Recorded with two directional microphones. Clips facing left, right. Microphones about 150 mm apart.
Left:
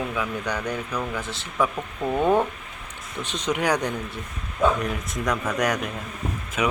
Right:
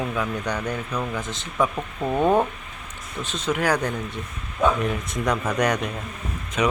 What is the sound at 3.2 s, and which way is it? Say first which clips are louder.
Speech: right 1 dB; 15° left (ahead or behind).